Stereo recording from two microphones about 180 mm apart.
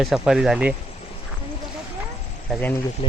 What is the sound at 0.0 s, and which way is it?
Speech, centre (ahead or behind).